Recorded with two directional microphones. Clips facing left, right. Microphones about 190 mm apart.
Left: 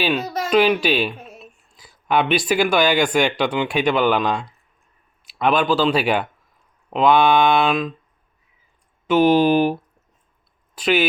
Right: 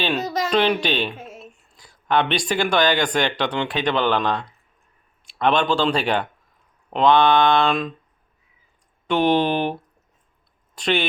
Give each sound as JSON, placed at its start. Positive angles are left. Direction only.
{"t": 0.0, "sound": "speech", "side_deg": 5}
{"t": 9.0, "sound": "speech", "side_deg": 5}
{"t": 10.8, "sound": "speech", "side_deg": 5}